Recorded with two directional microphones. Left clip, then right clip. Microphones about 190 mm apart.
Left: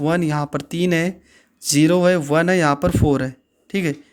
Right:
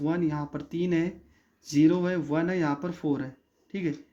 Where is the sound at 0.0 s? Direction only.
60° left (ahead or behind).